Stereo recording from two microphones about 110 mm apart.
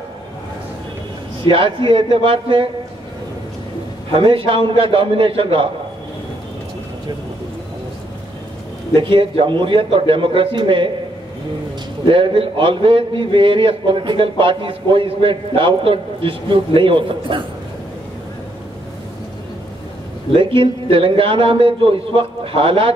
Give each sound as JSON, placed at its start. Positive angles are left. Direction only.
{"t": 1.4, "sound": "a man's voice", "side_deg": -50}
{"t": 4.1, "sound": "a man's voice", "side_deg": -55}
{"t": 8.9, "sound": "a man's voice", "side_deg": -55}
{"t": 12.1, "sound": "a man's voice", "side_deg": -55}
{"t": 20.3, "sound": "a man's voice", "side_deg": -55}